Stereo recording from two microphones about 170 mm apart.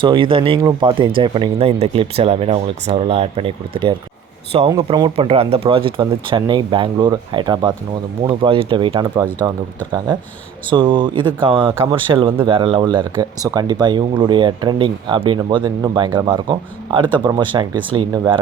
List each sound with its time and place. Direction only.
0.0 s speech: 30° right (ahead or behind)
10.7 s speech: 30° right (ahead or behind)
11.7 s speech: 15° right (ahead or behind)
11.9 s speech: 30° right (ahead or behind)